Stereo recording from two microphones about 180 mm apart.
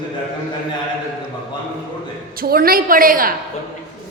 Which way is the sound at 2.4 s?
55° right (ahead or behind).